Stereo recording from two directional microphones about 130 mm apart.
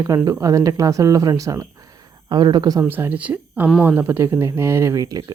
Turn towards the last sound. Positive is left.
turn(degrees=-25)  # may be behind; listen again after turning